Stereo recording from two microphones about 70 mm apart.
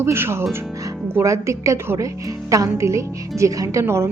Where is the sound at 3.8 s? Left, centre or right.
Right.